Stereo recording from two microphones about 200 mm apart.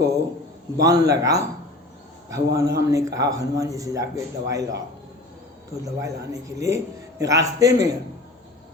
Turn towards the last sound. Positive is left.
turn(degrees=-15)  # may be behind; listen again after turning